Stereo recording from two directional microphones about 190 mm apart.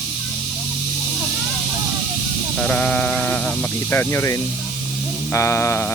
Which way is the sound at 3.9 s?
10° left (ahead or behind).